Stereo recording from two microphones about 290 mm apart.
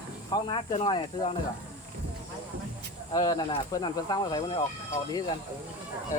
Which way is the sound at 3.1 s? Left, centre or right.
Centre.